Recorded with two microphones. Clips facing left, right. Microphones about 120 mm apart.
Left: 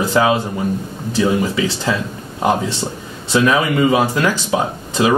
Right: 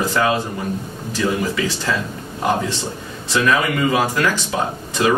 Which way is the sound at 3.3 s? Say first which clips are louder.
Left 3 dB; 25° left (ahead or behind).